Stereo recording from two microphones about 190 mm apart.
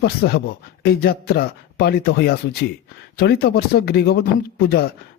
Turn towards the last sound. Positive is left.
turn(degrees=55)  # may be behind; listen again after turning